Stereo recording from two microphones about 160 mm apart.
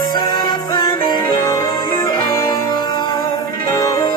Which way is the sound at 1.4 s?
20° left (ahead or behind).